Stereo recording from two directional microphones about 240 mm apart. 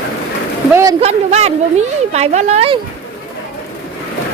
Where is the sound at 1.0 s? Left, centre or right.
Right.